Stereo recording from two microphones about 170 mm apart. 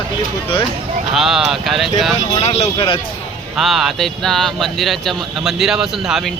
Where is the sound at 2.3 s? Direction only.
35° left (ahead or behind).